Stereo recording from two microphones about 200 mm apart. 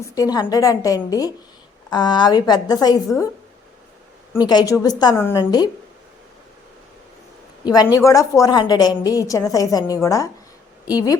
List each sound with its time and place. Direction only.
0.1 s a woman's voice: 20° left (ahead or behind)
4.4 s a woman's voice: 20° left (ahead or behind)
7.6 s a woman's voice: 20° left (ahead or behind)